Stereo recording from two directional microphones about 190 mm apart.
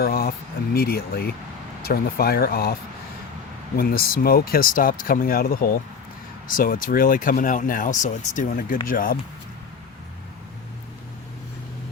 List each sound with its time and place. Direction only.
0.0 s speech: 50° left (ahead or behind)
3.8 s speech: 50° left (ahead or behind)